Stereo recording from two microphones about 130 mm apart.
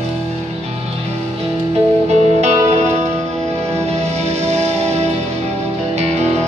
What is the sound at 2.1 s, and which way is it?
Music, 60° right (ahead or behind).